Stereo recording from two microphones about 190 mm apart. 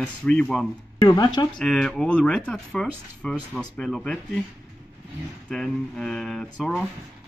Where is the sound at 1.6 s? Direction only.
Centre (ahead or behind).